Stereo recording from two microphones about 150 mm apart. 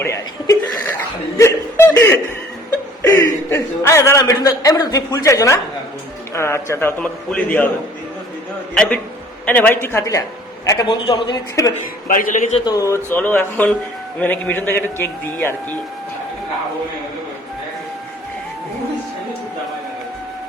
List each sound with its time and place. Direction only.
0.0 s chuckle: 20° left (ahead or behind)
3.5 s a man's voice: 20° left (ahead or behind)
8.7 s a man's voice: 5° left (ahead or behind); by 11.7 s 25° left (ahead or behind)
12.0 s a man's voice: 65° left (ahead or behind)
12.6 s a man's voice: 20° left (ahead or behind)